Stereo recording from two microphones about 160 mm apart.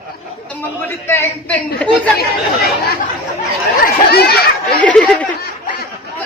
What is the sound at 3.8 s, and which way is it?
Chatter, 75° left (ahead or behind).